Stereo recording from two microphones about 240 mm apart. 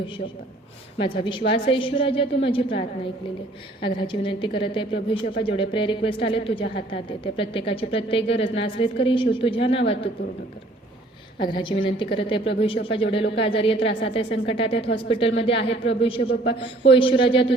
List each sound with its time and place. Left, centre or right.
0.9 s a woman's voice: centre
11.3 s a woman's voice: centre